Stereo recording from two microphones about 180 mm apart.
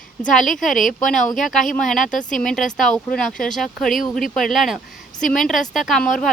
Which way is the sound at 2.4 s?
5° left (ahead or behind).